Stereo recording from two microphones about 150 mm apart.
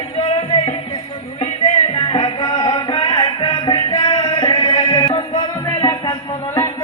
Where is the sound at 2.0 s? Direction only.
35° left (ahead or behind).